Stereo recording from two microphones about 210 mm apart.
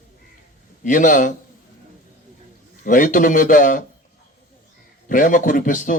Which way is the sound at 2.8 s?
40° left (ahead or behind).